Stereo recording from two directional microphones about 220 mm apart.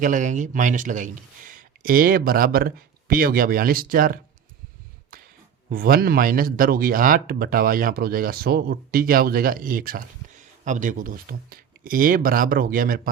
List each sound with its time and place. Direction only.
0.0 s speech: 35° right (ahead or behind)
5.7 s speech: 40° right (ahead or behind)